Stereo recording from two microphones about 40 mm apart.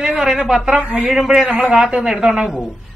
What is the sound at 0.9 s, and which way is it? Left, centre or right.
A man's voice, centre.